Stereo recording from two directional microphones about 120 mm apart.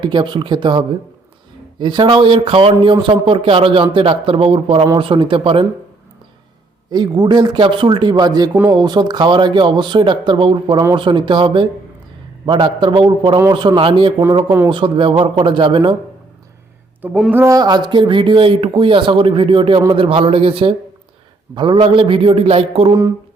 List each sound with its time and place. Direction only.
0.0 s speech: 40° right (ahead or behind)
6.9 s speech: 35° right (ahead or behind)
17.3 s speech: 25° right (ahead or behind); by 22.9 s 55° right (ahead or behind)
22.9 s a sound: 30° right (ahead or behind)